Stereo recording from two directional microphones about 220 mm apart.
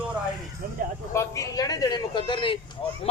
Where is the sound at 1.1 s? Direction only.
15° left (ahead or behind).